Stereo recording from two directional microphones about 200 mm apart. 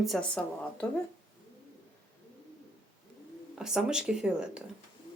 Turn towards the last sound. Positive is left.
turn(degrees=-5)  # may be behind; listen again after turning